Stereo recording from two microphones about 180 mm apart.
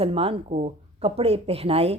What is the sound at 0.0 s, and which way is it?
Speech, 30° right (ahead or behind).